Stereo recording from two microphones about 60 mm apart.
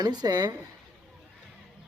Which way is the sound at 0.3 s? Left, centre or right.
Right.